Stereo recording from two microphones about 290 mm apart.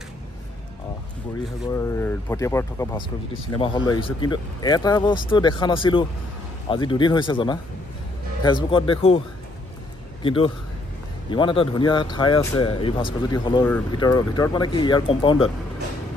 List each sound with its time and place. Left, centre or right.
1.7 s speech: centre
10.2 s a man's voice: centre